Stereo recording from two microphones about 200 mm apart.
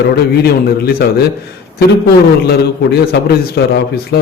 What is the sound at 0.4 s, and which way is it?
Speech, 50° left (ahead or behind).